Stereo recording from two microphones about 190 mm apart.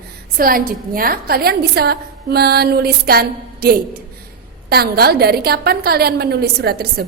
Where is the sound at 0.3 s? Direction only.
50° right (ahead or behind).